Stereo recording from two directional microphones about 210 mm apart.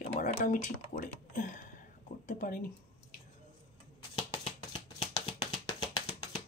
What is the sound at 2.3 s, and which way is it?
Music, 40° left (ahead or behind).